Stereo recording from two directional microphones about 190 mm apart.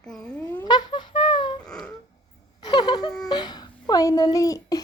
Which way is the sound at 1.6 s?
5° left (ahead or behind).